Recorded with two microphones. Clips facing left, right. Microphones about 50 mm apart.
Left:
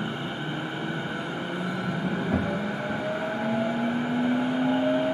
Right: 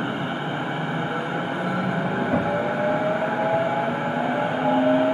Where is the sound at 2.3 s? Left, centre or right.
Right.